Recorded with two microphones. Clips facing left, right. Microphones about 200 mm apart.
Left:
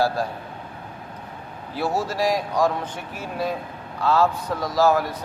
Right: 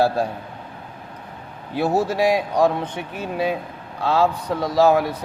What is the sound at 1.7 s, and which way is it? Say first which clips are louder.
A man's voice: right 5 dB; 60° right (ahead or behind).